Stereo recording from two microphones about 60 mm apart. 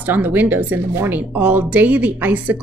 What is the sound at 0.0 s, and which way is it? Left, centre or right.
Speech, right.